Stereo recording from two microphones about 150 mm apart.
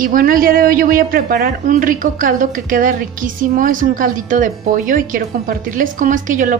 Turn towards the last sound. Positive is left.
turn(degrees=-60)  # may be behind; listen again after turning